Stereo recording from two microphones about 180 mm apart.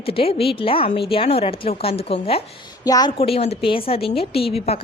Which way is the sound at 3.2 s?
35° left (ahead or behind).